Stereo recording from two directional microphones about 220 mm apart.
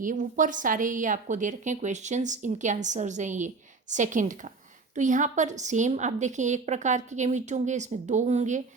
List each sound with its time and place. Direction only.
0.0 s a woman's voice: 35° right (ahead or behind)